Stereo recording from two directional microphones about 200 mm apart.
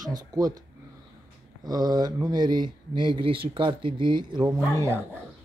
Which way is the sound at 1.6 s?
20° right (ahead or behind).